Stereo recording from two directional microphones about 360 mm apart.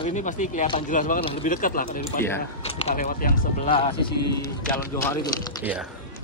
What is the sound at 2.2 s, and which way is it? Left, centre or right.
Speech, centre.